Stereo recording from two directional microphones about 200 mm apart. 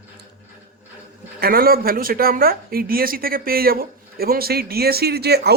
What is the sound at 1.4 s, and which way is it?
Speech, 50° right (ahead or behind).